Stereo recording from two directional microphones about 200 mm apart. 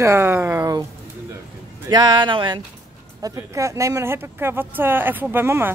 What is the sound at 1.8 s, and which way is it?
Speech, 20° right (ahead or behind).